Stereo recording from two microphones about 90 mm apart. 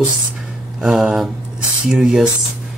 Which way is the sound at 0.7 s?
10° right (ahead or behind).